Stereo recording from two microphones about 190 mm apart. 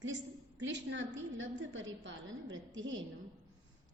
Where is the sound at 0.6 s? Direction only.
70° right (ahead or behind); by 2.9 s 85° right.